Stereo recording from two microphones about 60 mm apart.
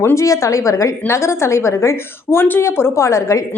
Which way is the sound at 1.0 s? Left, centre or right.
Left.